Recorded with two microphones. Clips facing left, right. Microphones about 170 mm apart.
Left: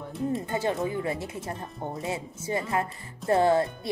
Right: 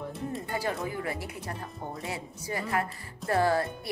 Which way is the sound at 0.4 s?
20° left (ahead or behind).